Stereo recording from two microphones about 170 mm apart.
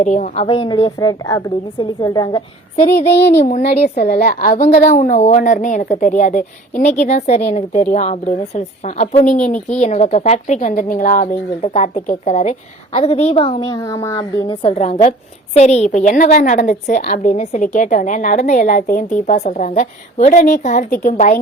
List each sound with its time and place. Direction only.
0.0 s a woman's voice: 45° left (ahead or behind)
0.4 s a woman's voice: 30° left (ahead or behind)
3.2 s child singing: 85° left
3.4 s a woman's voice: 40° left (ahead or behind)
3.9 s a woman's voice: 65° left (ahead or behind)
4.9 s a woman's voice: 45° left (ahead or behind)